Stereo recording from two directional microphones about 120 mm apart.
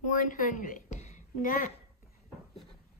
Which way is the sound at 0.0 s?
90° left.